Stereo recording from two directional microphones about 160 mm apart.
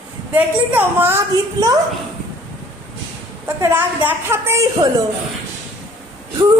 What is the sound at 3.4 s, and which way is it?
A woman's voice, 10° right (ahead or behind).